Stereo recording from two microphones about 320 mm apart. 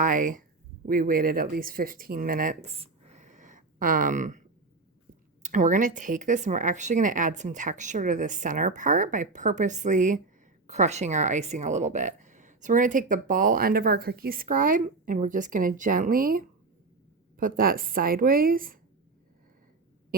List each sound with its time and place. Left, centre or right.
0.0 s speech: right